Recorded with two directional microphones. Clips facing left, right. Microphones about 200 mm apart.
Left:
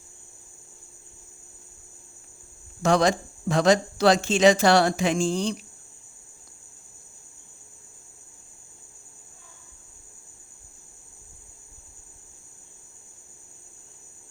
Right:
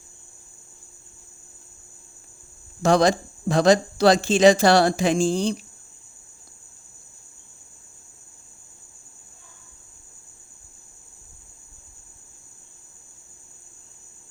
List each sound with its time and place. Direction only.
2.8 s speech: 35° right (ahead or behind)